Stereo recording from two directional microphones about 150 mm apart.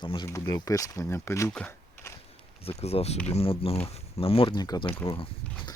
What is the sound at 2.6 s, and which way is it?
Speech, 40° left (ahead or behind).